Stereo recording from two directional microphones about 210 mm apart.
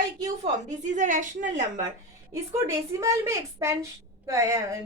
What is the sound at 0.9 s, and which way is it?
Speech, 35° right (ahead or behind).